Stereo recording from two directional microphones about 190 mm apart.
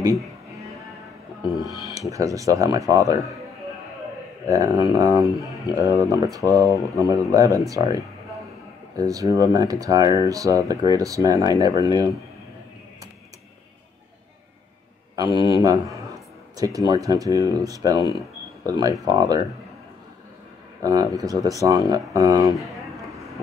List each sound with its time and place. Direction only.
1.5 s music: centre (ahead or behind)
2.0 s speech: 15° right (ahead or behind)
4.5 s speech: 20° right (ahead or behind)
15.1 s a man's voice: 20° right (ahead or behind)
20.8 s speech: 20° right (ahead or behind)
22.6 s a sound: centre (ahead or behind)